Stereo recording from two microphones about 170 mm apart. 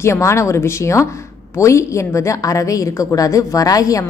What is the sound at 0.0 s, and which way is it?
A woman's voice, 15° left (ahead or behind).